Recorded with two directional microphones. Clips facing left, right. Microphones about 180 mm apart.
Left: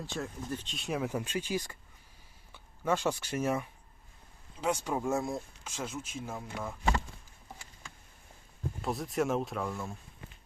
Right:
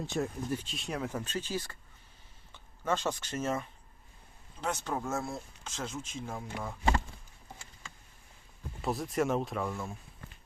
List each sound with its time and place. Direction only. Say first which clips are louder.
0.0 s speech: right 4 dB; 20° right (ahead or behind)
0.7 s speech: left 2 dB; centre (ahead or behind)
1.0 s speech: left 2 dB; 10° left (ahead or behind)
8.8 s speech: right 1 dB; centre (ahead or behind)